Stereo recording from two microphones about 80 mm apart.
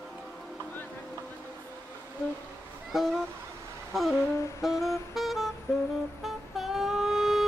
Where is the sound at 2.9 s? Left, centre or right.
Centre.